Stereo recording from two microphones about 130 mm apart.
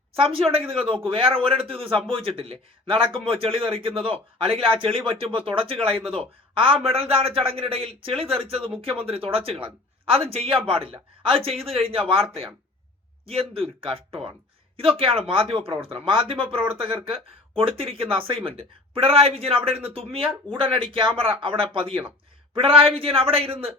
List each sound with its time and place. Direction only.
0.2 s speech: 45° right (ahead or behind)